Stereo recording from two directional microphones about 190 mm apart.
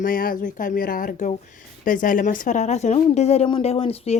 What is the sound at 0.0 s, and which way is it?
Speech, 50° left (ahead or behind).